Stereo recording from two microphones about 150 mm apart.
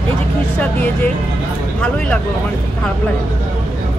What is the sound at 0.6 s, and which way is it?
Speech, 10° left (ahead or behind).